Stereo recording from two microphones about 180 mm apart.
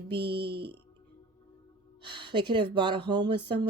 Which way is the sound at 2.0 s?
25° right (ahead or behind).